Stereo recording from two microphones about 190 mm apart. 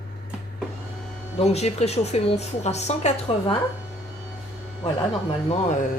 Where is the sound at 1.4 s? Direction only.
35° left (ahead or behind).